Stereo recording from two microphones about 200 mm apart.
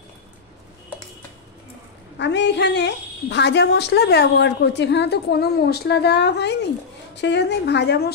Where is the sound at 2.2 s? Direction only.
60° left (ahead or behind).